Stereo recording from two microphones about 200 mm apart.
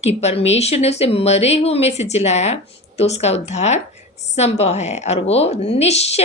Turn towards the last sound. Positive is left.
turn(degrees=30)  # may be behind; listen again after turning